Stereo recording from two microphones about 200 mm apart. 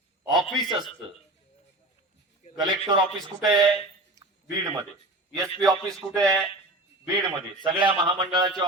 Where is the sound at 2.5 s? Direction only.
25° right (ahead or behind).